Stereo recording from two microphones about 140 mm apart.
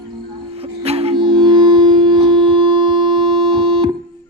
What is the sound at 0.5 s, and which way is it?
Music, 45° right (ahead or behind).